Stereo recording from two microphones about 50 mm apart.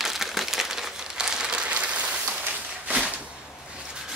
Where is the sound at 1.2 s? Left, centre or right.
Centre.